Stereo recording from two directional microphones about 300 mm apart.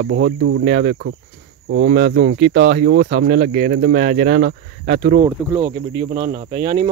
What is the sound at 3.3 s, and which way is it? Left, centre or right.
Speech, right.